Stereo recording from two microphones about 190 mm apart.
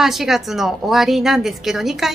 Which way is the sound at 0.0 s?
Centre (ahead or behind).